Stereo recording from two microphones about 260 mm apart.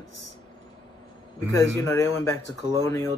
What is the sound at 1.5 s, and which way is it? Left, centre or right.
Speech, centre.